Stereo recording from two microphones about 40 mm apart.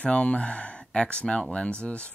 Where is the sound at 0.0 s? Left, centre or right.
Left.